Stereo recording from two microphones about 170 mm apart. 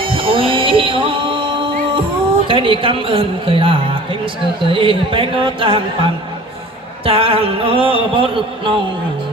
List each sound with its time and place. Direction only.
0.0 s music: 30° right (ahead or behind)
2.5 s speech: 30° right (ahead or behind)